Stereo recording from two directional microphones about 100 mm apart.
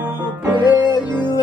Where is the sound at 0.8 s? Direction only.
45° left (ahead or behind).